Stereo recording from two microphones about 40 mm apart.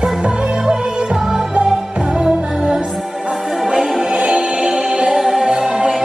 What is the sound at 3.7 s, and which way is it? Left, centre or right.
Music, right.